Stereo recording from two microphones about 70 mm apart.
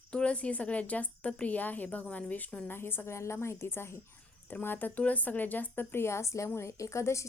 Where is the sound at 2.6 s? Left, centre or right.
Left.